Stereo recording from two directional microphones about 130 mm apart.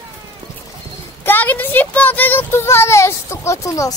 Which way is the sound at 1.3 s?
15° left (ahead or behind).